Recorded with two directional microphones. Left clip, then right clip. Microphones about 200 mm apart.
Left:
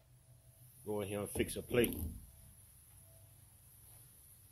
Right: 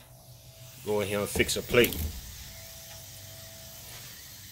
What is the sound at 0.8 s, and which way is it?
Speech, 35° left (ahead or behind).